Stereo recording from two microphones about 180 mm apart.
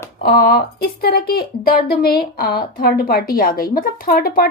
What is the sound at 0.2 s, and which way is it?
Speech, 55° left (ahead or behind).